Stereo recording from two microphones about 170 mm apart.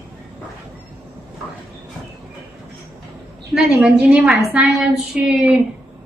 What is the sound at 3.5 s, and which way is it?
A woman's voice, 5° right (ahead or behind).